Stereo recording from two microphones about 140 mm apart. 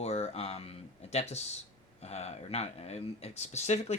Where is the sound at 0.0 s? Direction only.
50° left (ahead or behind).